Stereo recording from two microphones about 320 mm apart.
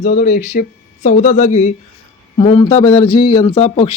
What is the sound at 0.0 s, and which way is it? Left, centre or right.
Speech, left.